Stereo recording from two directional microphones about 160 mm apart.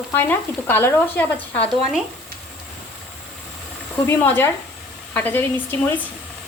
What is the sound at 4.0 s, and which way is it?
Speech, 15° left (ahead or behind).